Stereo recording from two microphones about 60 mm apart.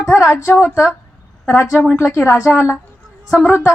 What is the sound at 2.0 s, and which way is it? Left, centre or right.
Speech, left.